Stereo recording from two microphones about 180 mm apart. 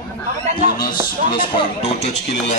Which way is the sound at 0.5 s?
25° left (ahead or behind).